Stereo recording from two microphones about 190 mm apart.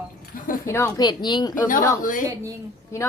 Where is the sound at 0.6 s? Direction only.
15° left (ahead or behind).